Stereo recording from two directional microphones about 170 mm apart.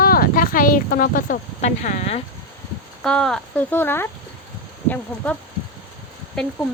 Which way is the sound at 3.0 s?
5° left (ahead or behind).